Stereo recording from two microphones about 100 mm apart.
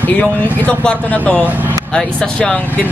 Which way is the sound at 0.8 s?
10° left (ahead or behind).